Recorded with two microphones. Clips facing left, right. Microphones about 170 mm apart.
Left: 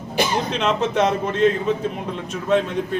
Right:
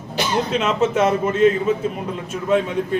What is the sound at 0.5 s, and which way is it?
A man's voice, 5° right (ahead or behind).